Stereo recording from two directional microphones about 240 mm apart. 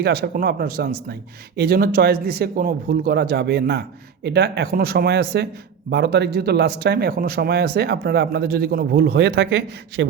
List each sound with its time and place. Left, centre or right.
0.0 s a man's voice: right